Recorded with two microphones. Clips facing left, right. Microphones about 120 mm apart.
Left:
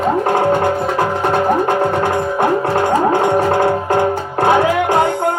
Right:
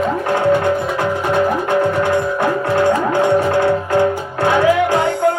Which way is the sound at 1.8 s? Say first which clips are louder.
Even; 25° left (ahead or behind).